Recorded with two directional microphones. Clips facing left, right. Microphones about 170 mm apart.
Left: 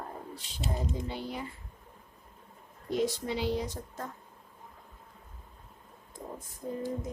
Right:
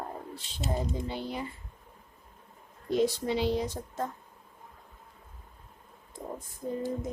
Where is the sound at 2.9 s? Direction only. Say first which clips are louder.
Right 3 dB; 25° right (ahead or behind).